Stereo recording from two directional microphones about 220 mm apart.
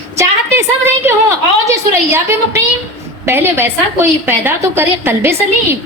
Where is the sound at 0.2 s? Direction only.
10° right (ahead or behind).